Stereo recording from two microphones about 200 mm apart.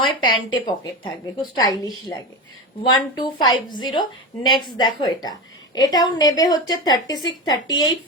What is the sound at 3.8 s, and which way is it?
Speech, 25° left (ahead or behind).